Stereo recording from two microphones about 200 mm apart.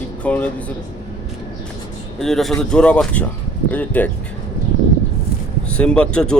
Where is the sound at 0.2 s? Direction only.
5° left (ahead or behind).